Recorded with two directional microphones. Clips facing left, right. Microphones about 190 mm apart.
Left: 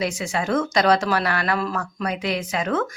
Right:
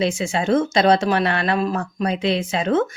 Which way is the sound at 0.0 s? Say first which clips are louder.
Right 4 dB; 25° right (ahead or behind).